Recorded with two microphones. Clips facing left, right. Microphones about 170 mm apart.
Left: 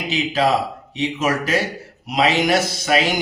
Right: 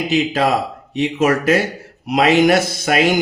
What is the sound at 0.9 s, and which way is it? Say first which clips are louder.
Speech: right 5 dB; 50° right (ahead or behind).